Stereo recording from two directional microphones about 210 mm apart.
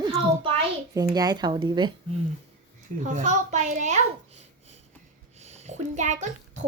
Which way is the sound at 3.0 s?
35° right (ahead or behind).